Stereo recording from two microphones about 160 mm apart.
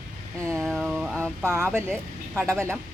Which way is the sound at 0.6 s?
Centre (ahead or behind).